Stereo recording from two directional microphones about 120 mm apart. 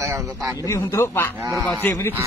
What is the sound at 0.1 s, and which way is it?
Speech, 30° right (ahead or behind).